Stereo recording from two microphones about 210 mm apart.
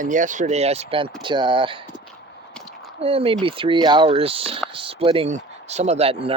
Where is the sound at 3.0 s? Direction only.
25° right (ahead or behind).